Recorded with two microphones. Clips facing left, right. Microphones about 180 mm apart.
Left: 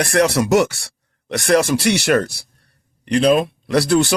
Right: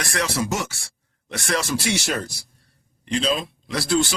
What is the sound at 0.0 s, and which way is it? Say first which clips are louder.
Speech: left 9 dB; 60° left (ahead or behind).